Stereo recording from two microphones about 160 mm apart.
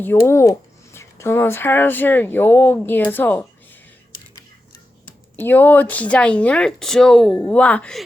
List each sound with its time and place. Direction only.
0.0 s speech: 15° left (ahead or behind)
5.4 s speech: 10° left (ahead or behind)